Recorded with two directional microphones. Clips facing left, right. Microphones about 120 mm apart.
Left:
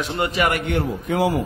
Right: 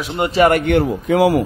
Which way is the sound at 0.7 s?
85° right.